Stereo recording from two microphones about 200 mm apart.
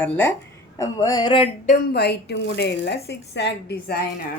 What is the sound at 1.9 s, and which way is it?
Speech, 55° left (ahead or behind).